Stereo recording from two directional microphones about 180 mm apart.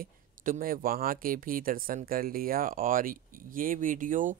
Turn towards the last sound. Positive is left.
turn(degrees=-45)  # may be behind; listen again after turning